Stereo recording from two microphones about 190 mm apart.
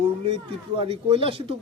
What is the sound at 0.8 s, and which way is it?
Speech, 30° right (ahead or behind).